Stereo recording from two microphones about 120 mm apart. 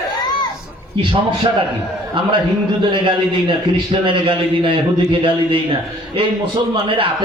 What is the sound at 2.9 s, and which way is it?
A man's voice, 45° right (ahead or behind).